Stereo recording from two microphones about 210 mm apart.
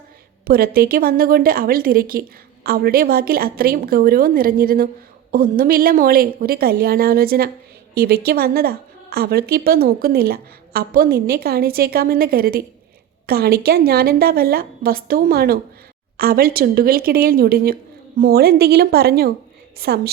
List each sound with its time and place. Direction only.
0.4 s a woman's voice: 45° right (ahead or behind)